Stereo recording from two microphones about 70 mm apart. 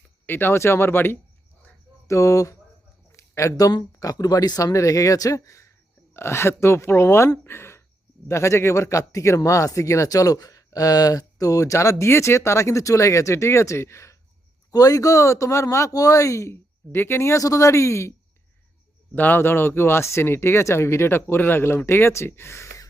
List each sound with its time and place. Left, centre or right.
0.3 s speech: left
2.0 s speech: left
3.1 s a sound: left
3.7 s speech: left
7.4 s a sound: left
8.3 s speech: left
14.7 s speech: left
19.1 s speech: left